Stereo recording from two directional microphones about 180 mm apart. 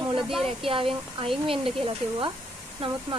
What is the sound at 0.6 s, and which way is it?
Speech, 30° right (ahead or behind).